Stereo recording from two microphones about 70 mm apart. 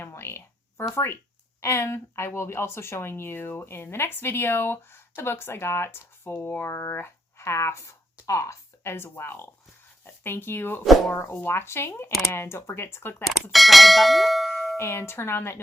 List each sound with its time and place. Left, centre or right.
0.0 s a sound: left
0.9 s speech: left
6.7 s speech: left
10.8 s speech: centre
11.1 s speech: left
13.5 s speech: centre
14.8 s speech: left